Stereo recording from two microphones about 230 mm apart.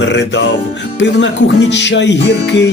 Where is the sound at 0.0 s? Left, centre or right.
Left.